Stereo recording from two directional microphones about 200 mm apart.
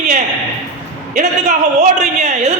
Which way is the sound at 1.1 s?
35° right (ahead or behind).